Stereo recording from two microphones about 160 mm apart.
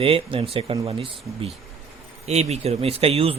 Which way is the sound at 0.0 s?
35° right (ahead or behind).